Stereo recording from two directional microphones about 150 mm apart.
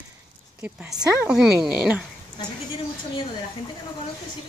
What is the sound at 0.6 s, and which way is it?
Speech, 10° right (ahead or behind).